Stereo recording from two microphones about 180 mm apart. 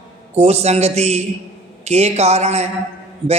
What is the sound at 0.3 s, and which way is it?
A man's voice, 35° right (ahead or behind).